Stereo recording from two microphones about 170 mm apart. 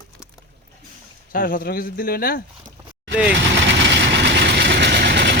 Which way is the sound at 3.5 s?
90° right.